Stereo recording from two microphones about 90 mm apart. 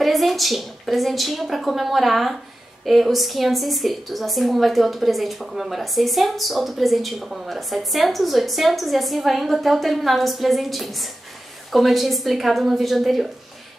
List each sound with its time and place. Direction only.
0.0 s a woman's voice: centre (ahead or behind)